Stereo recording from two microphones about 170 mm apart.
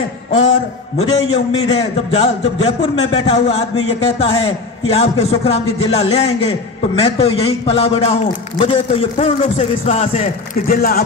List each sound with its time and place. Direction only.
0.9 s a man's voice: 40° left (ahead or behind)
10.7 s speech: 65° left (ahead or behind)